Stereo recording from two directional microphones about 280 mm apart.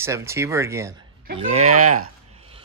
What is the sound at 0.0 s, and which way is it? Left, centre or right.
Speech, centre.